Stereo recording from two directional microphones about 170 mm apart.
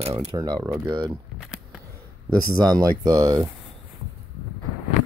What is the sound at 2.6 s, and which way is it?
Speech, 20° right (ahead or behind).